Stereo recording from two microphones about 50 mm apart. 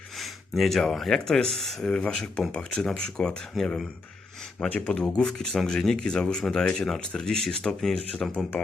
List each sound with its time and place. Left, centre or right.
0.2 s speech: centre
3.6 s speech: centre
4.6 s speech: centre